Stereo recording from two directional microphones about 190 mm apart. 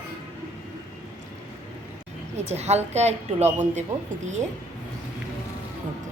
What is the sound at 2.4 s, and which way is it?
A woman's voice, 35° right (ahead or behind).